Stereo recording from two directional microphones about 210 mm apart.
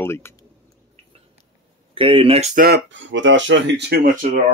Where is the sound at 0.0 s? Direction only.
10° left (ahead or behind).